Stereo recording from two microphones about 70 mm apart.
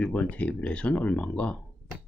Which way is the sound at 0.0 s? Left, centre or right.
Centre.